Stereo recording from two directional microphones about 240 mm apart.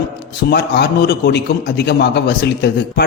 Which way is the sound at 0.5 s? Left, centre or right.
Left.